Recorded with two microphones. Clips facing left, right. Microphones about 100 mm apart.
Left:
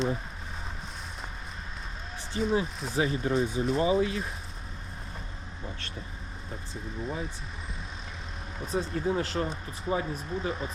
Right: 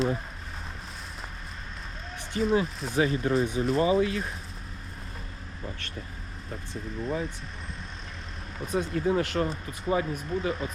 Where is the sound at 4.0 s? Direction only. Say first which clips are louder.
Right 2 dB; 35° left (ahead or behind).